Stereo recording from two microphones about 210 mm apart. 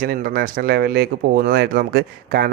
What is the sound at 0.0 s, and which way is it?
Speech, 45° right (ahead or behind).